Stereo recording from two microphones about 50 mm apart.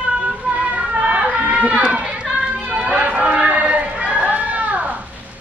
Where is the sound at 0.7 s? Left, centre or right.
Right.